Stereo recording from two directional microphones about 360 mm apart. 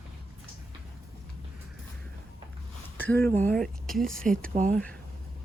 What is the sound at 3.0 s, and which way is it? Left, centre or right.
Speech, centre.